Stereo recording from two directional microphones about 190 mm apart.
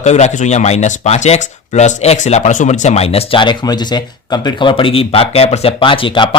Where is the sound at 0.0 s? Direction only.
35° left (ahead or behind).